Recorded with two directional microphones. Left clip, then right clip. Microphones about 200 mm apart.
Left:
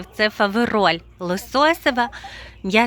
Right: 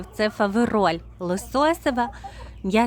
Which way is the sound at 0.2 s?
Centre (ahead or behind).